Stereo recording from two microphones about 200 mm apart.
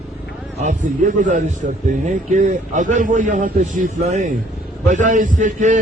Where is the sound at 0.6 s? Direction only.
40° right (ahead or behind).